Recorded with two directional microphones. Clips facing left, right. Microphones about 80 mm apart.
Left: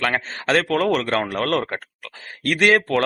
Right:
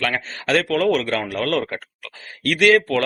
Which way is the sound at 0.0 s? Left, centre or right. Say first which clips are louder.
Left 1 dB; left.